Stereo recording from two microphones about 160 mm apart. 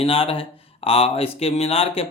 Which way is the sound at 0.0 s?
35° left (ahead or behind).